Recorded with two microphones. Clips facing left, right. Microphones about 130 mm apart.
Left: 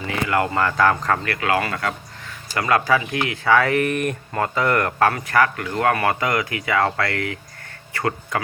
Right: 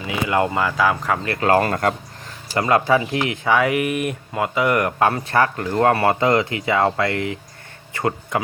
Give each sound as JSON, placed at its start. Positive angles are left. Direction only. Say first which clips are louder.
{"t": 0.1, "sound": "speech", "louder": "right 2 dB", "side_deg": -20}
{"t": 1.2, "sound": "speech", "louder": "right 2 dB", "side_deg": -25}
{"t": 1.5, "sound": "speech", "louder": "right 5 dB", "side_deg": -40}
{"t": 2.6, "sound": "speech", "louder": "right 2 dB", "side_deg": -25}